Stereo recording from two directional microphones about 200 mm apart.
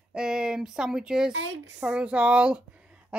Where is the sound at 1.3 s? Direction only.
70° right (ahead or behind).